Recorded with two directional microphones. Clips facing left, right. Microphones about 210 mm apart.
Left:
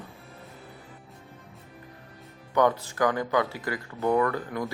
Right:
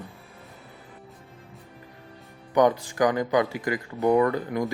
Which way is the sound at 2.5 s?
15° right (ahead or behind).